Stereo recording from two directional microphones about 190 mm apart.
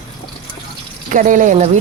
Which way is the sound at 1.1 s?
45° right (ahead or behind).